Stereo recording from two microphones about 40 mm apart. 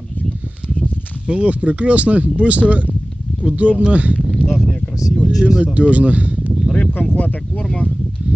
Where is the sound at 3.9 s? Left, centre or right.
Right.